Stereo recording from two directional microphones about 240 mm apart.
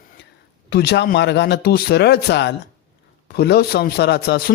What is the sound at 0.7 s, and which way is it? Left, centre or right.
Speech, left.